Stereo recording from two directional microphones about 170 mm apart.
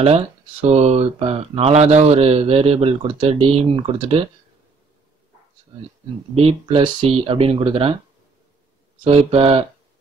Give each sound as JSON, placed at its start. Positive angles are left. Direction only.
{"t": 0.0, "sound": "speech", "side_deg": -35}
{"t": 6.3, "sound": "speech", "side_deg": -35}
{"t": 9.0, "sound": "speech", "side_deg": -35}